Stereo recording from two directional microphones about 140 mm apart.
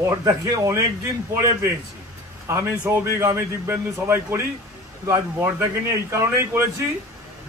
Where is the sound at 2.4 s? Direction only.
20° right (ahead or behind).